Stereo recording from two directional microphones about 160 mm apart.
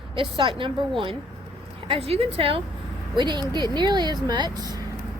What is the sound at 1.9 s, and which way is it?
Speech, 40° right (ahead or behind).